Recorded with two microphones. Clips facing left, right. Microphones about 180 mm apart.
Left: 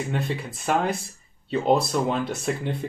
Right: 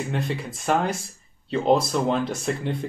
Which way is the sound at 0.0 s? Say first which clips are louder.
Even; centre (ahead or behind).